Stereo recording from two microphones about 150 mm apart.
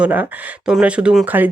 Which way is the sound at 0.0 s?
10° right (ahead or behind).